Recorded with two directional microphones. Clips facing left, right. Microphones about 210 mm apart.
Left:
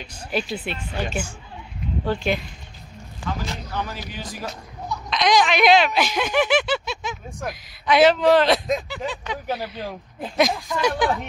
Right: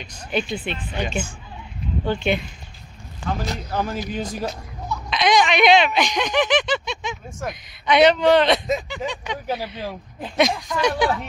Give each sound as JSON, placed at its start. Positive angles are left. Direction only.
{"t": 0.3, "sound": "speech", "side_deg": 5}
{"t": 3.4, "sound": "speech", "side_deg": -45}
{"t": 5.1, "sound": "speech", "side_deg": 0}